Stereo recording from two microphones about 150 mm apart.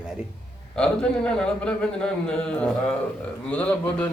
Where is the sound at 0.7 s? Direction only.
5° left (ahead or behind).